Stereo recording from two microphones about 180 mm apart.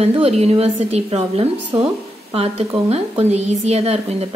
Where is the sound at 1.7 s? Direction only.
25° right (ahead or behind).